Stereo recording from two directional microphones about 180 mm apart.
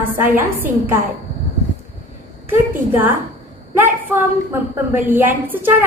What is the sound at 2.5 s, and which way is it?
A woman's voice, 10° right (ahead or behind).